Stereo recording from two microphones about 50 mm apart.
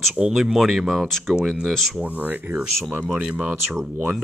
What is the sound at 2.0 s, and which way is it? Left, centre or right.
Speech, right.